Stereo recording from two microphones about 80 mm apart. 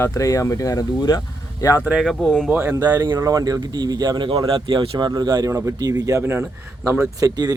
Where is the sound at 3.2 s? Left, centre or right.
Right.